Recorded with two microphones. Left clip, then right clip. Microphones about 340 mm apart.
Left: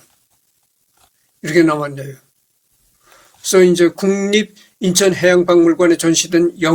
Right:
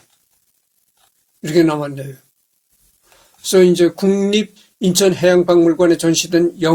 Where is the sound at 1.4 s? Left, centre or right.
Centre.